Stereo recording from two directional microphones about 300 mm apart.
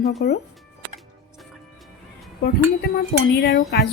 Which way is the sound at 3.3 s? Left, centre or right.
Left.